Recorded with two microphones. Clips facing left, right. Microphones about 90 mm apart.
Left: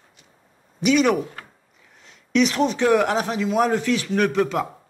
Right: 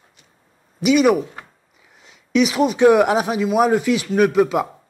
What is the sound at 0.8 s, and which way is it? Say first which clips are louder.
Speech: right 3 dB; 5° right (ahead or behind).